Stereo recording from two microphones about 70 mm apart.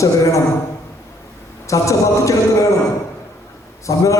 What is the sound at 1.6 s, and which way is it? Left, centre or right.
A man's voice, left.